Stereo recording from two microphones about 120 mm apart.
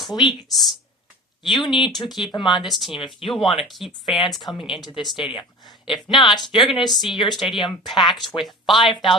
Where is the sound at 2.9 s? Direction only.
45° left (ahead or behind).